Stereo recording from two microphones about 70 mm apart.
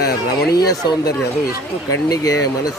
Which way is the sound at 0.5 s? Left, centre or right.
Left.